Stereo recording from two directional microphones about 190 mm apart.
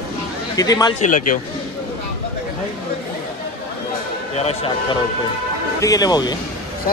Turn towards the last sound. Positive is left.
turn(degrees=20)  # may be behind; listen again after turning